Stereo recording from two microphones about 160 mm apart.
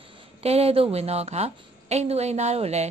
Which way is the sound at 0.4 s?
40° right (ahead or behind).